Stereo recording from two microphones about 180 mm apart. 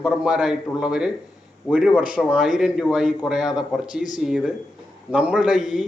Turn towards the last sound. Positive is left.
turn(degrees=-5)  # may be behind; listen again after turning